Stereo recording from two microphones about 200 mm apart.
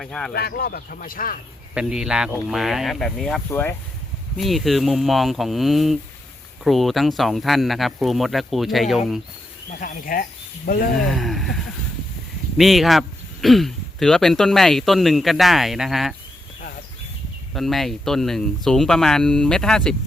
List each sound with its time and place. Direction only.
0.0 s speech: centre (ahead or behind)
0.3 s speech: 50° left (ahead or behind)
1.7 s speech: 5° right (ahead or behind)
9.8 s speech: 40° left (ahead or behind)
11.1 s a sound: centre (ahead or behind)
12.5 s speech: centre (ahead or behind)
17.5 s speech: centre (ahead or behind)